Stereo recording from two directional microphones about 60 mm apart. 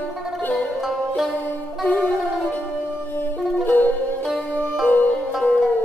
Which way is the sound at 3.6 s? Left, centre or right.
Left.